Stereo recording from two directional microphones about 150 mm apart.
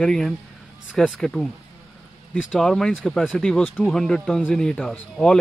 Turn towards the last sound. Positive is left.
turn(degrees=5)  # may be behind; listen again after turning